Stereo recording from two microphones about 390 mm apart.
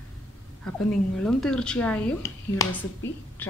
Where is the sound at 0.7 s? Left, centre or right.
Centre.